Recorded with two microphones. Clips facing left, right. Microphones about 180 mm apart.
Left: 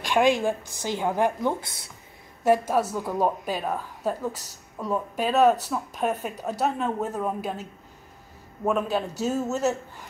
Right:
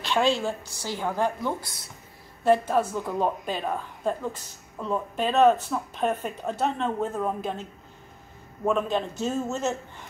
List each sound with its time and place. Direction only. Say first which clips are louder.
0.0 s a woman's voice: left 3 dB; 15° left (ahead or behind)
2.9 s speech: left 1 dB; 10° left (ahead or behind)
8.6 s speech: even; 5° left (ahead or behind)